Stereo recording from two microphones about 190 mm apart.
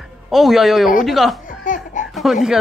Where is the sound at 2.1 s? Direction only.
Centre (ahead or behind).